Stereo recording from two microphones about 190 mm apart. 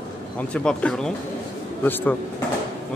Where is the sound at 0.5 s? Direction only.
5° left (ahead or behind).